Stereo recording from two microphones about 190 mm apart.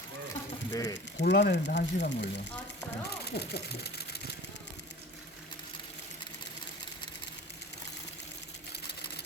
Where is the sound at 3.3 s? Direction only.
60° left (ahead or behind).